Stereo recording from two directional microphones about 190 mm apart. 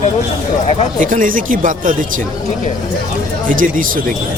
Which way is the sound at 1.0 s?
45° right (ahead or behind).